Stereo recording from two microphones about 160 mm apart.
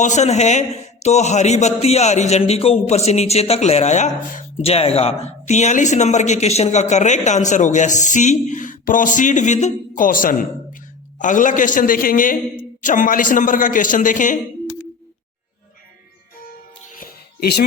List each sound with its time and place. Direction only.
0.0 s a man's voice: 45° left (ahead or behind)
16.9 s music: 70° left (ahead or behind)